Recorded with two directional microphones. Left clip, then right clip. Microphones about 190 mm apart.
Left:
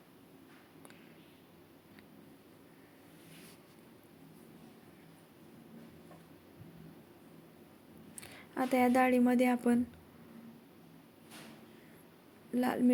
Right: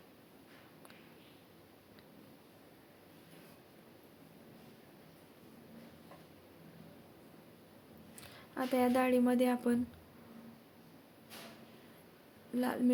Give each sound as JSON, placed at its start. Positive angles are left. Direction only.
{"t": 8.5, "sound": "a woman's voice", "side_deg": 20}
{"t": 12.5, "sound": "speech", "side_deg": 20}